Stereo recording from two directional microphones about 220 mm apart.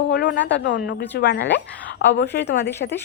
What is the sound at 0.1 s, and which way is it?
A woman's voice, 50° left (ahead or behind).